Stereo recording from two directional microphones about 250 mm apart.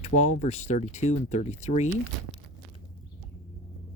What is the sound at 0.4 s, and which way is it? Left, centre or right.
Speech, left.